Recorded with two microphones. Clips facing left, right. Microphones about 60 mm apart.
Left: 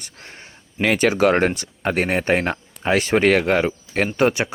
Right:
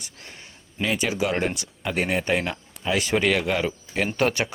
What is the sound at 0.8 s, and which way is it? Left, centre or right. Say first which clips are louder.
Speech: left 8 dB; left.